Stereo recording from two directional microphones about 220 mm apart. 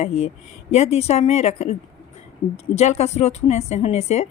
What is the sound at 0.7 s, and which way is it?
A woman's voice, 30° left (ahead or behind).